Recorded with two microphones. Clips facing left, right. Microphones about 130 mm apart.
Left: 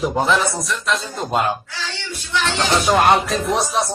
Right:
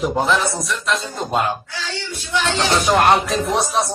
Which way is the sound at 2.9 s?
Centre (ahead or behind).